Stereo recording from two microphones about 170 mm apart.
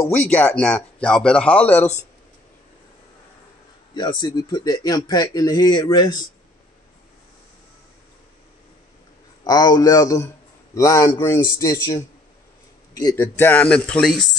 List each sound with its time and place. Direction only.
0.1 s speech: 10° left (ahead or behind)
3.9 s a man's voice: 25° left (ahead or behind)
9.4 s a man's voice: 25° left (ahead or behind)
13.0 s speech: 15° left (ahead or behind)